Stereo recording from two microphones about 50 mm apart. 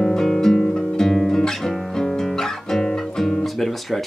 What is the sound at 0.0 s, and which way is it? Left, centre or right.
Guitar, centre.